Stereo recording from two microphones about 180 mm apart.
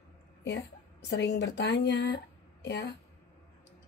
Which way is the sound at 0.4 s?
75° left (ahead or behind).